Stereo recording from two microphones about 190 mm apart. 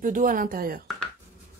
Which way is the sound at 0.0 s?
45° right (ahead or behind).